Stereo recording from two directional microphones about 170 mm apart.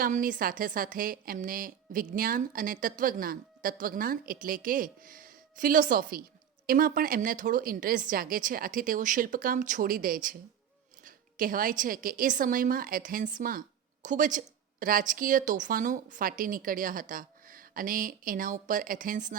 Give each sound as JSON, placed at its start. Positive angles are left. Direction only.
{"t": 0.0, "sound": "a woman's voice", "side_deg": -55}